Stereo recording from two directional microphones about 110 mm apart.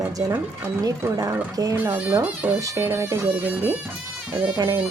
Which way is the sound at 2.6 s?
25° right (ahead or behind).